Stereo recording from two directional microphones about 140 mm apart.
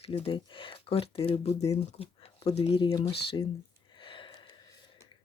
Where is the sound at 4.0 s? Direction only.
35° left (ahead or behind).